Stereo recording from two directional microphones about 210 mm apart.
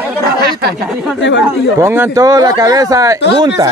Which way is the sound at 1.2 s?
60° left (ahead or behind).